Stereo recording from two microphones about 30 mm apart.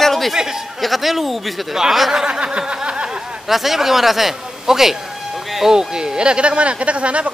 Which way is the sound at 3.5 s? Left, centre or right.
Centre.